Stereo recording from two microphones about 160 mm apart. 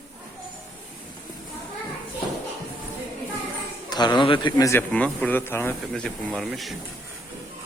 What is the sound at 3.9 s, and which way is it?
Speech, 25° left (ahead or behind).